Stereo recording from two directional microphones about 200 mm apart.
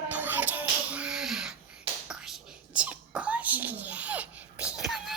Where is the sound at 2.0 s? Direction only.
Centre (ahead or behind).